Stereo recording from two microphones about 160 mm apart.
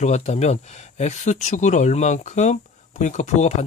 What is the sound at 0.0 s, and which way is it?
Speech, 45° left (ahead or behind).